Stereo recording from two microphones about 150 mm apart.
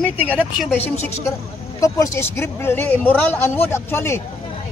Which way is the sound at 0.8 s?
45° left (ahead or behind).